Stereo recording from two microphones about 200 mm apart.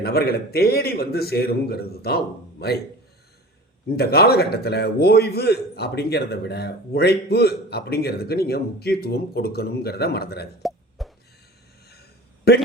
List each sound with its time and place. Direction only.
0.0 s a man's voice: 50° left (ahead or behind)
3.8 s a man's voice: 50° left (ahead or behind)
10.6 s plop: centre (ahead or behind)
12.5 s a man's voice: 55° left (ahead or behind)